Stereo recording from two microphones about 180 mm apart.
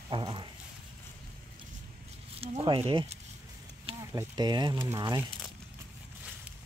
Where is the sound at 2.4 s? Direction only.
30° right (ahead or behind).